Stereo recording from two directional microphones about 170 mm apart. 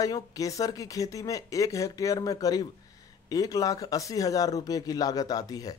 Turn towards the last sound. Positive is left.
turn(degrees=20)  # may be behind; listen again after turning